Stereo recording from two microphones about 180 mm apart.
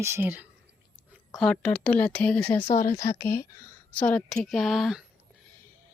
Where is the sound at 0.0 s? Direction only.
15° right (ahead or behind).